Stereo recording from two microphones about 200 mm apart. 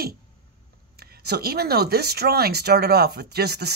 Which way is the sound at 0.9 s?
50° right (ahead or behind).